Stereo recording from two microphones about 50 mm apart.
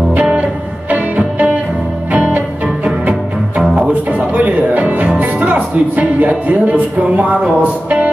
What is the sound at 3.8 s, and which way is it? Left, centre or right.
Music, right.